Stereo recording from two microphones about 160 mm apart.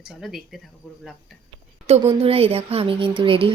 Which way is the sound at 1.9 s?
40° right (ahead or behind).